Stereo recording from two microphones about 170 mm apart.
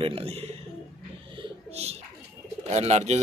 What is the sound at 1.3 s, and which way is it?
Bird, 40° right (ahead or behind).